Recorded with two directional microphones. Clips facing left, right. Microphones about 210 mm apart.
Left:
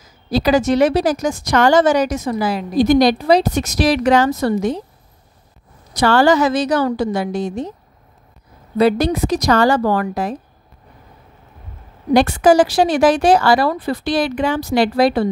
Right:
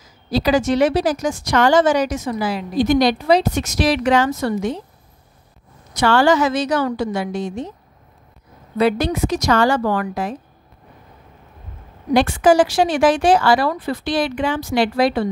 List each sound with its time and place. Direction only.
0.3 s a woman's voice: 45° left (ahead or behind)
5.9 s a woman's voice: 40° left (ahead or behind)
8.7 s a woman's voice: 35° left (ahead or behind)
12.1 s a woman's voice: 40° left (ahead or behind)